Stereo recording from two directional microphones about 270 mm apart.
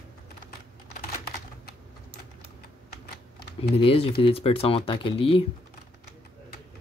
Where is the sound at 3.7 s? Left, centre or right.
Left.